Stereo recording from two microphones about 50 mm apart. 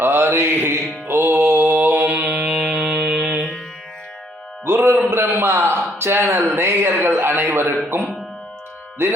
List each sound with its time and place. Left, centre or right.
0.0 s mantra: right
4.6 s music: right
5.1 s a man's voice: right